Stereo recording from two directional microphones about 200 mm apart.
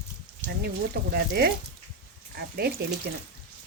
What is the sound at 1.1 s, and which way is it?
Speech, 55° right (ahead or behind).